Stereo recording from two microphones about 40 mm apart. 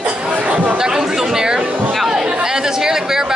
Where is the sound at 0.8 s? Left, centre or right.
Centre.